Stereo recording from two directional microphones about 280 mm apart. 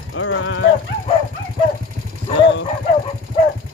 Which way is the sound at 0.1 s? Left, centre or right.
Left.